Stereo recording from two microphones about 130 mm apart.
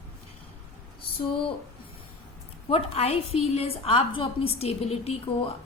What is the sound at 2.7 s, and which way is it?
A woman's voice, 50° left (ahead or behind).